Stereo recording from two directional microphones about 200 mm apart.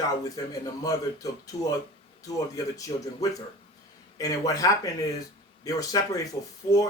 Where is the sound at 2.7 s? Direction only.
15° left (ahead or behind).